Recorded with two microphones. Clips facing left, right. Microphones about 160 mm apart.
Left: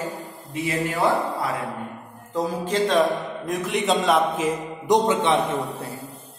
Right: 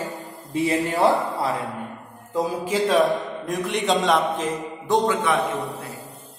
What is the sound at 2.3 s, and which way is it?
A man's voice, 10° right (ahead or behind).